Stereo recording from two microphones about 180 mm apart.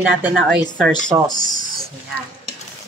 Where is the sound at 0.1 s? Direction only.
5° right (ahead or behind).